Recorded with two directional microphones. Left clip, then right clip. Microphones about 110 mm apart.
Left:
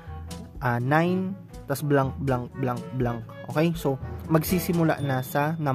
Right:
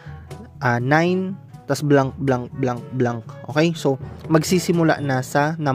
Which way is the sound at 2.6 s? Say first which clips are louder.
Right 6 dB; centre (ahead or behind).